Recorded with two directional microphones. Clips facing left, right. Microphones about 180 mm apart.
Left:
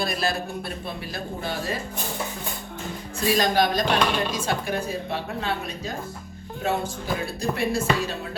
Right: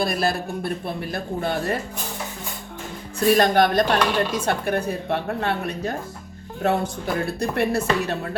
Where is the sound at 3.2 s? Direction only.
60° right (ahead or behind).